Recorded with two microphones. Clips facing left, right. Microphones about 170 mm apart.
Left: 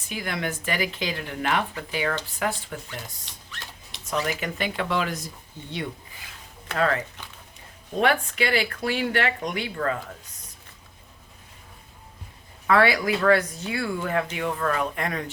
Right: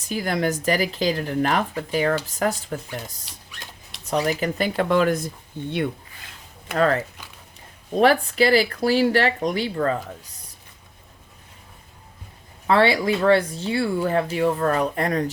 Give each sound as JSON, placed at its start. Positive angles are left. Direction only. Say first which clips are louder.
{"t": 0.1, "sound": "speech", "louder": "right 7 dB", "side_deg": -40}
{"t": 6.7, "sound": "speech", "louder": "right 4 dB", "side_deg": -40}
{"t": 12.6, "sound": "speech", "louder": "right 2 dB", "side_deg": -30}